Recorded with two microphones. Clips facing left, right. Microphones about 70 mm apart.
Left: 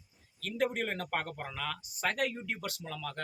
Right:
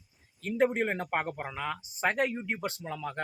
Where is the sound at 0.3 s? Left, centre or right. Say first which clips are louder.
Right 5 dB; right.